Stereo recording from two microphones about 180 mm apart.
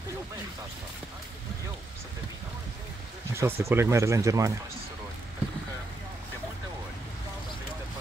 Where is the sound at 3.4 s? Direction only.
15° right (ahead or behind).